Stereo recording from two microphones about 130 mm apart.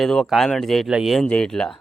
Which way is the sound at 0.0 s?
Centre (ahead or behind).